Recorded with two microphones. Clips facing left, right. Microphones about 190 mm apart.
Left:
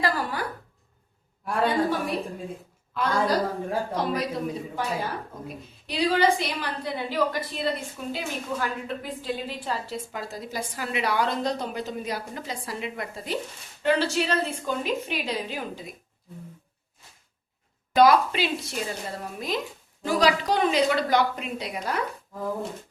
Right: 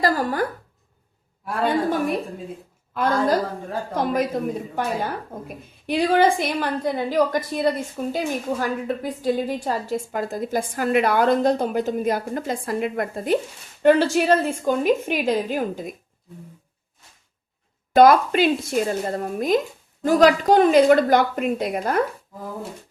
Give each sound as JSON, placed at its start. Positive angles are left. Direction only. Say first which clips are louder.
{"t": 0.0, "sound": "speech", "louder": "right 6 dB", "side_deg": -40}
{"t": 1.6, "sound": "a woman's voice", "louder": "right 4 dB", "side_deg": -50}
{"t": 17.9, "sound": "a woman's voice", "louder": "right 5 dB", "side_deg": -50}